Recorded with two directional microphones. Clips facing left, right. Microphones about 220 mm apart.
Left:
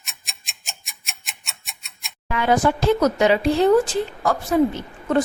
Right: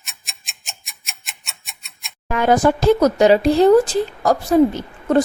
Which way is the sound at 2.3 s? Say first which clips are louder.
Right 4 dB; 45° right (ahead or behind).